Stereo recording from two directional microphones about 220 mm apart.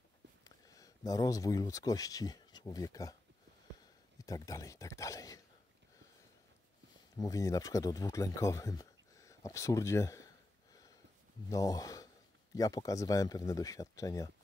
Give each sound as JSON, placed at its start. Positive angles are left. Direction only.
{"t": 0.4, "sound": "speech", "side_deg": 15}
{"t": 4.2, "sound": "speech", "side_deg": 15}
{"t": 7.2, "sound": "speech", "side_deg": 15}